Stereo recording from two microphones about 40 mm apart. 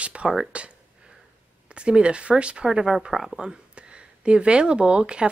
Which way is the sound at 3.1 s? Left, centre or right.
Centre.